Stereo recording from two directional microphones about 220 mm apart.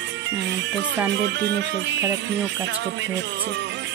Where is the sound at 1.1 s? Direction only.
50° right (ahead or behind).